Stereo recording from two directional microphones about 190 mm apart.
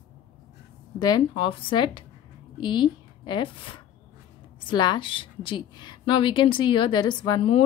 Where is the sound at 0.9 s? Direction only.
20° left (ahead or behind).